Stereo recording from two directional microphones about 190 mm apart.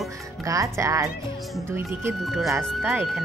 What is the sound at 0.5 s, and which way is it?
Speech, 15° right (ahead or behind).